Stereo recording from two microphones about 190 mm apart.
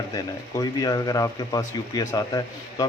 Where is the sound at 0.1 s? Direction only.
20° left (ahead or behind).